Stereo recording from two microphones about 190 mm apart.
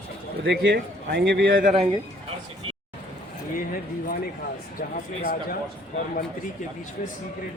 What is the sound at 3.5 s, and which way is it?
Speech, 50° left (ahead or behind).